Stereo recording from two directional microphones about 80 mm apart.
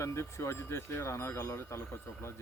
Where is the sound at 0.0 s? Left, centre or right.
Left.